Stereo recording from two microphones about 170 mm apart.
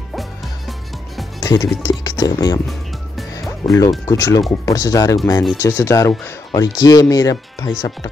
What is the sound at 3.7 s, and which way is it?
Speech, 20° left (ahead or behind).